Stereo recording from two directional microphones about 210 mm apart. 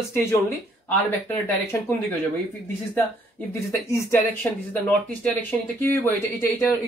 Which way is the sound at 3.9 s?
10° left (ahead or behind).